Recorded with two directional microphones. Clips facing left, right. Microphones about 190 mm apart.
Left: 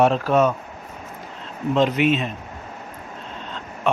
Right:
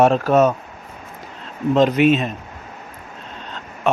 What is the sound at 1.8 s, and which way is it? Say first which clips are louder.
Speech: right 4 dB; 40° right (ahead or behind).